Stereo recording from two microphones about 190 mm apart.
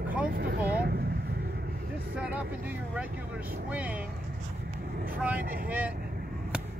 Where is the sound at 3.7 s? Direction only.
10° right (ahead or behind).